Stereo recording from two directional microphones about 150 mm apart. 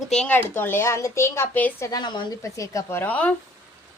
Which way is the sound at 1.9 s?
30° left (ahead or behind).